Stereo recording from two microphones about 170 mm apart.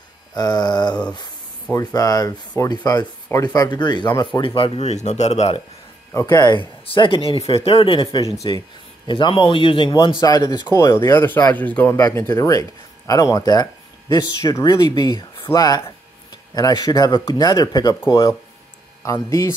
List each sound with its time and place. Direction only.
0.3 s speech: 25° left (ahead or behind); by 5.6 s 40° left (ahead or behind)
6.2 s speech: 25° left (ahead or behind)